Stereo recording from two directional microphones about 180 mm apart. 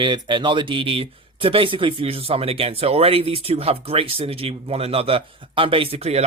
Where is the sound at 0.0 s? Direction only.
25° right (ahead or behind).